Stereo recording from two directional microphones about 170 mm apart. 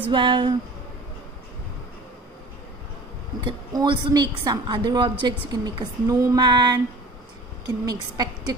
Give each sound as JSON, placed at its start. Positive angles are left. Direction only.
{"t": 0.1, "sound": "a woman's voice", "side_deg": -30}
{"t": 3.3, "sound": "a woman's voice", "side_deg": -30}